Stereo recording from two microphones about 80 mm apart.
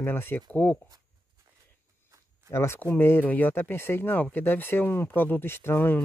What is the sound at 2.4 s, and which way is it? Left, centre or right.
Speech, left.